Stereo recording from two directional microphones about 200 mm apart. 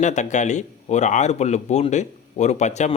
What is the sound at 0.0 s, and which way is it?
Speech, 35° left (ahead or behind).